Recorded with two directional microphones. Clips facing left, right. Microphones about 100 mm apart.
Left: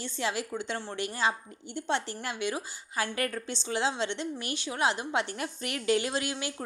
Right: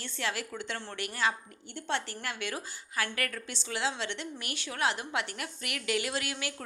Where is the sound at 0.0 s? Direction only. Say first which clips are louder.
Left 3 dB; 20° left (ahead or behind).